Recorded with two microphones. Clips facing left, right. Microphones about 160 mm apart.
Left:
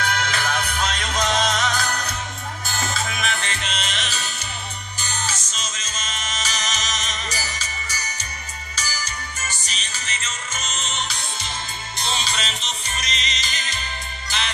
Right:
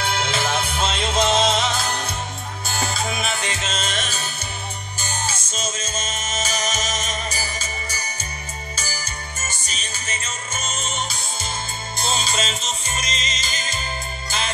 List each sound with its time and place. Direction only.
0.0 s music: 30° right (ahead or behind)
3.1 s music: 40° right (ahead or behind)
8.7 s music: 50° right (ahead or behind)
10.7 s music: 50° right (ahead or behind)